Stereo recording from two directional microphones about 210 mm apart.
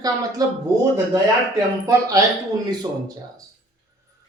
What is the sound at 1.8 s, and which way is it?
Speech, 15° right (ahead or behind).